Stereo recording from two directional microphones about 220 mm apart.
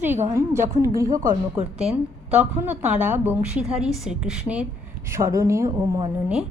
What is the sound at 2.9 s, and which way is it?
Speech, 30° right (ahead or behind).